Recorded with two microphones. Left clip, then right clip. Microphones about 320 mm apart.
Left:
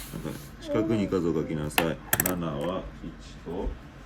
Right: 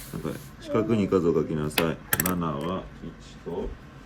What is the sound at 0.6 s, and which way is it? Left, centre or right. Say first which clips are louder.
Speech: right 1 dB; centre.